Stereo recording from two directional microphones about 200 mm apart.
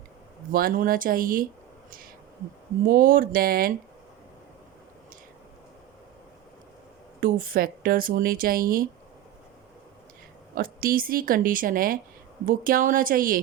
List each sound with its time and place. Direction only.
0.5 s speech: 45° right (ahead or behind)
2.8 s speech: 45° right (ahead or behind)
7.2 s speech: 45° right (ahead or behind)
10.5 s speech: 45° right (ahead or behind)